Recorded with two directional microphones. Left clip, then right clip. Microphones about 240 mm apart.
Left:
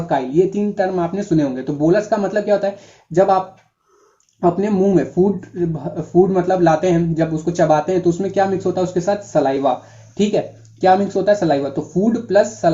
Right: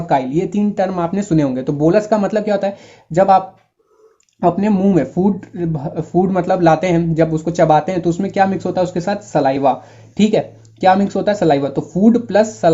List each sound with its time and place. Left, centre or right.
0.1 s speech: right